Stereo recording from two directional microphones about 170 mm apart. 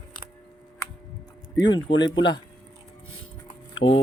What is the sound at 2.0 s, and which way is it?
Speech, 25° left (ahead or behind).